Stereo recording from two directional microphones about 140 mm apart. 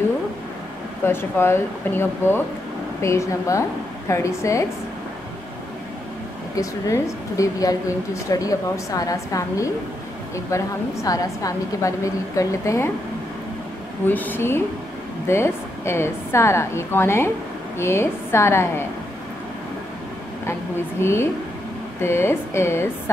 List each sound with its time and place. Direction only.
1.0 s a woman's voice: 15° left (ahead or behind)
6.5 s a woman's voice: 25° left (ahead or behind)
14.0 s a woman's voice: 15° left (ahead or behind)
21.0 s a woman's voice: 20° left (ahead or behind)